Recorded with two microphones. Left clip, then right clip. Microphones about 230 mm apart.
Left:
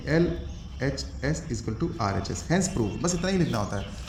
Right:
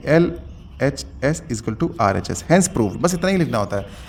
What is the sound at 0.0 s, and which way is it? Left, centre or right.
A man's voice, right.